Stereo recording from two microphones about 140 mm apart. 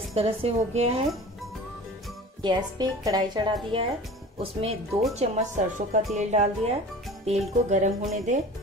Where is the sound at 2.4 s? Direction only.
30° right (ahead or behind).